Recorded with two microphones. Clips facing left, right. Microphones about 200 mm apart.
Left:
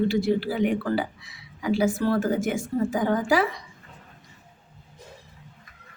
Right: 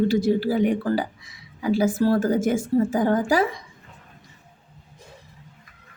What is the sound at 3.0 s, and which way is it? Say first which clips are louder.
Speech: right 2 dB; 45° right (ahead or behind).